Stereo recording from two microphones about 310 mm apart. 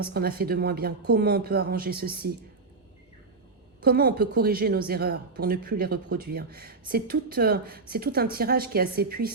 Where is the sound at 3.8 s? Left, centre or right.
Right.